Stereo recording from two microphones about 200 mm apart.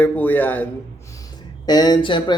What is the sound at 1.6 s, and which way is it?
Speech, 20° left (ahead or behind).